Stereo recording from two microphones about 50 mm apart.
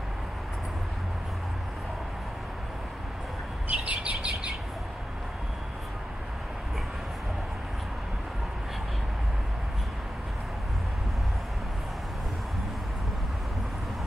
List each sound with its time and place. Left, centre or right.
3.6 s bird: right